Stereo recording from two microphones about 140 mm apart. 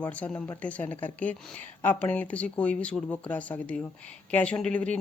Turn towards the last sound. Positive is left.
turn(degrees=10)  # may be behind; listen again after turning